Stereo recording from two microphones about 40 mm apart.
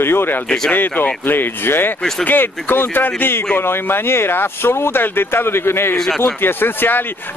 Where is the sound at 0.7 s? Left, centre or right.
Left.